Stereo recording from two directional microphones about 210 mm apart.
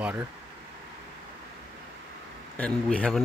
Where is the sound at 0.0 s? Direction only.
10° right (ahead or behind).